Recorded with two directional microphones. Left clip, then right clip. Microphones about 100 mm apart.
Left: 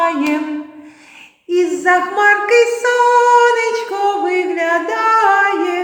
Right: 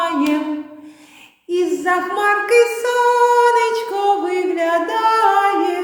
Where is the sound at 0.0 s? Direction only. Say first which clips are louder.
Left 3 dB; 15° right (ahead or behind).